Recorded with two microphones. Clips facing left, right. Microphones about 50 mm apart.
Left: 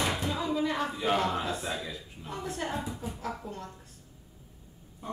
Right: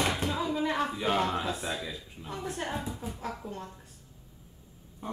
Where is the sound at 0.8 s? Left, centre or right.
Centre.